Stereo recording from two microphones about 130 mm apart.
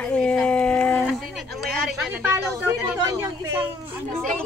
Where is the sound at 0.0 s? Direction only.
10° left (ahead or behind).